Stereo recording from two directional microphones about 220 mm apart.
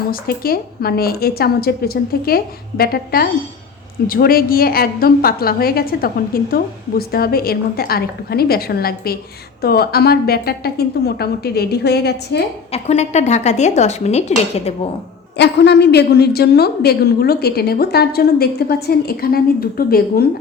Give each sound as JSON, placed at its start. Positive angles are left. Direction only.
{"t": 0.1, "sound": "a woman's voice", "side_deg": 40}
{"t": 12.7, "sound": "speech", "side_deg": 30}
{"t": 15.4, "sound": "a woman's voice", "side_deg": 50}